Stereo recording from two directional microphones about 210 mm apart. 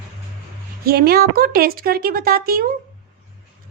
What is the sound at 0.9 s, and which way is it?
Speech, 45° right (ahead or behind).